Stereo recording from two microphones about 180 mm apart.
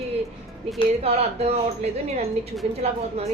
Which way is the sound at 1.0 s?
35° right (ahead or behind).